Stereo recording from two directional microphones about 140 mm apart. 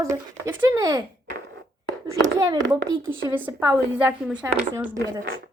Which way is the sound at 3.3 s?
15° right (ahead or behind).